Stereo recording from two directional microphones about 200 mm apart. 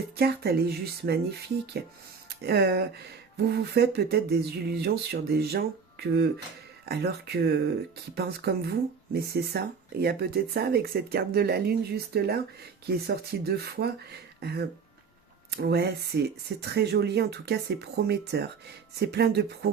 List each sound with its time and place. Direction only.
0.2 s speech: 55° right (ahead or behind)
2.4 s speech: 55° right (ahead or behind)